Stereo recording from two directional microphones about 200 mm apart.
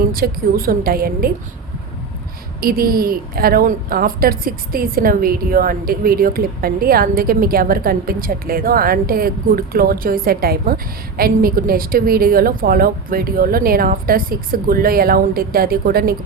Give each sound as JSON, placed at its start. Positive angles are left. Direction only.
{"t": 0.0, "sound": "a woman's voice", "side_deg": -45}
{"t": 2.6, "sound": "a woman's voice", "side_deg": -45}